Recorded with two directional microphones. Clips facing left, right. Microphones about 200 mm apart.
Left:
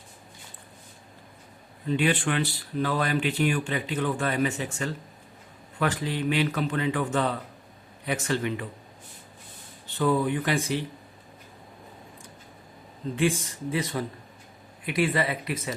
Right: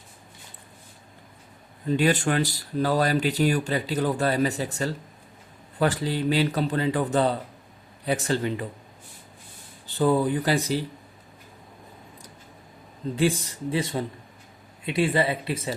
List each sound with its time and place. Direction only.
1.9 s speech: 40° right (ahead or behind)
9.8 s speech: 30° right (ahead or behind)
13.1 s speech: 35° right (ahead or behind)